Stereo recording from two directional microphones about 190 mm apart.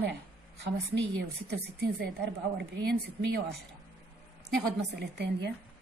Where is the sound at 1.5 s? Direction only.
60° right (ahead or behind).